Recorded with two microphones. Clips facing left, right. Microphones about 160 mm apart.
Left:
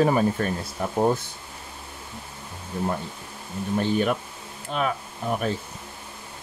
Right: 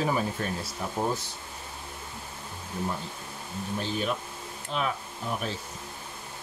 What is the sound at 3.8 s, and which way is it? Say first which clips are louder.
Speech: left 8 dB; 60° left (ahead or behind).